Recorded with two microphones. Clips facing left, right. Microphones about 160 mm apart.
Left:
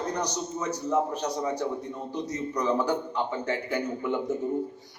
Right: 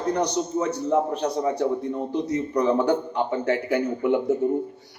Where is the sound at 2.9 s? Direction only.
50° right (ahead or behind).